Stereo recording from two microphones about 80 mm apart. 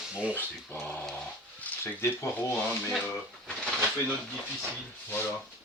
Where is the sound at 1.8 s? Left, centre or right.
Left.